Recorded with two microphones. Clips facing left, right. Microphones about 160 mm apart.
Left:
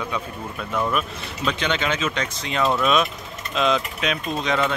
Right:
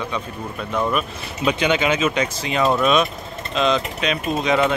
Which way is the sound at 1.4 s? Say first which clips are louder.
Right 5 dB; 10° right (ahead or behind).